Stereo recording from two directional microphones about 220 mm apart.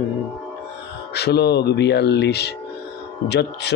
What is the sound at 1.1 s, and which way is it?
Speech, 50° left (ahead or behind).